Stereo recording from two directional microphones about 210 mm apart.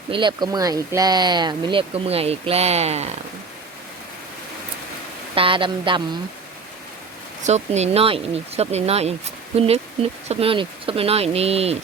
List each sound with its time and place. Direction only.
0.1 s speech: 20° right (ahead or behind)
5.3 s speech: 25° right (ahead or behind)
7.4 s speech: 30° right (ahead or behind)